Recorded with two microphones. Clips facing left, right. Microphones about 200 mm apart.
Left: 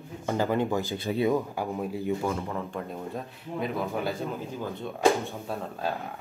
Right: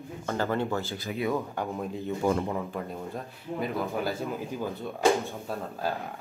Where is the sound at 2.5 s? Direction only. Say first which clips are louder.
Right 1 dB; centre (ahead or behind).